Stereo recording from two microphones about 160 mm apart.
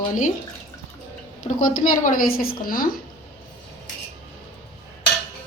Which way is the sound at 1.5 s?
55° left (ahead or behind).